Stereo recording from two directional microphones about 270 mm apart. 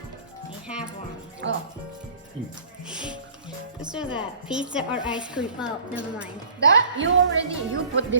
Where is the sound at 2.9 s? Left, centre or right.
Centre.